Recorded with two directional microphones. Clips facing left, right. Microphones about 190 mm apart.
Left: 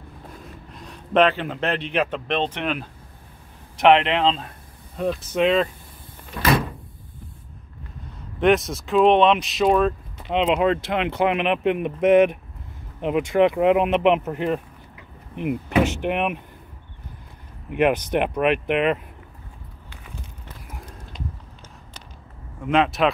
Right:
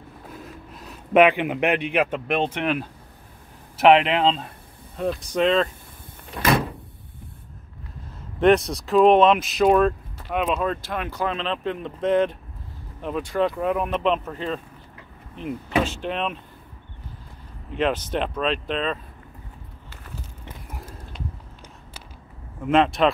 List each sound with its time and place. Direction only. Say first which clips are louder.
0.3 s speech: right 4 dB; 5° right (ahead or behind)
8.4 s speech: right 1 dB; centre (ahead or behind)
10.2 s speech: left 4 dB; 20° left (ahead or behind)
17.6 s speech: left 4 dB; 15° left (ahead or behind)
19.9 s a sound: even; centre (ahead or behind)
22.6 s speech: right 1 dB; centre (ahead or behind)